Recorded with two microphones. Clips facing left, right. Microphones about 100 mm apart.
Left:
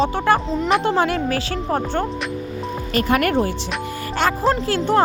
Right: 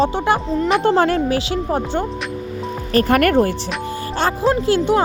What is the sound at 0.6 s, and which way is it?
Speech, centre (ahead or behind).